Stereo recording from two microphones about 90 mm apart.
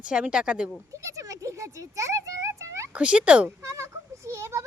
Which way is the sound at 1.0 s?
35° right (ahead or behind).